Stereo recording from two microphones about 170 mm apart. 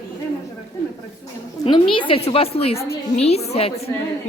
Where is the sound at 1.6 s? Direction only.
30° left (ahead or behind).